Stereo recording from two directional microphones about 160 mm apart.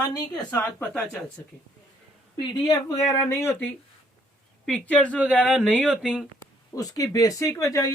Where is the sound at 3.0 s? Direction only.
10° left (ahead or behind).